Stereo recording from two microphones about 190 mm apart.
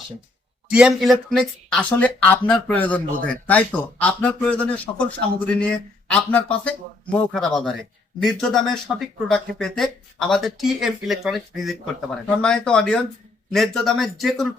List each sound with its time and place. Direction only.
0.7 s speech: 5° right (ahead or behind)